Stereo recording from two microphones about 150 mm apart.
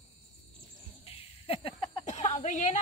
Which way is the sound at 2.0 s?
50° left (ahead or behind).